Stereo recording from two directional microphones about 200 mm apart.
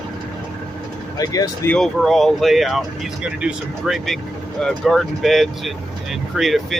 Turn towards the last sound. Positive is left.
turn(degrees=0)  # may be behind; listen again after turning